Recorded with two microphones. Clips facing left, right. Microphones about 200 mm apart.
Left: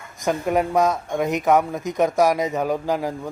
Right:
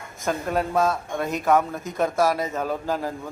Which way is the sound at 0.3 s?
15° left (ahead or behind).